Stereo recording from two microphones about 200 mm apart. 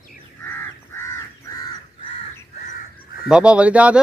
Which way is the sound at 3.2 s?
5° right (ahead or behind).